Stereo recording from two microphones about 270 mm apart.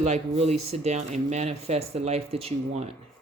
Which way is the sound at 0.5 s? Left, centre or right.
Right.